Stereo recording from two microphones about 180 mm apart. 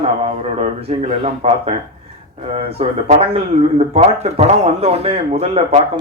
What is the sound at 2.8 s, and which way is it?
A man's voice, 35° right (ahead or behind).